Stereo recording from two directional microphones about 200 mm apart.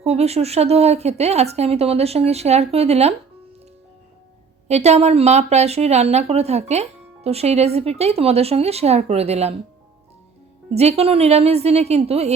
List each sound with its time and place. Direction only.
0.0 s speech: 30° right (ahead or behind)
4.7 s speech: 35° right (ahead or behind)
10.8 s speech: 30° right (ahead or behind)